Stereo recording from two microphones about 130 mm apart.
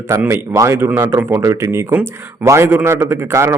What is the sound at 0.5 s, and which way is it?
A man's voice, 20° right (ahead or behind).